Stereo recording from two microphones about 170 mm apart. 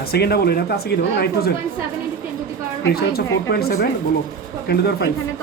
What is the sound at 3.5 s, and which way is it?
Speech, 65° left (ahead or behind).